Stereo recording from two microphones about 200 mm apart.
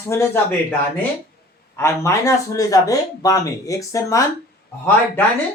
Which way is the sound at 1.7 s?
15° left (ahead or behind).